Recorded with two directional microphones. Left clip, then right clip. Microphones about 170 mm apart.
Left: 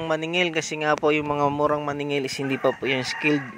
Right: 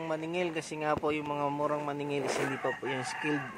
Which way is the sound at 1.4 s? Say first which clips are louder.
Left 9 dB; 45° left (ahead or behind).